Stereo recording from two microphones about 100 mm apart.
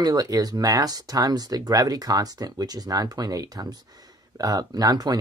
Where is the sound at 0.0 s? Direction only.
40° right (ahead or behind).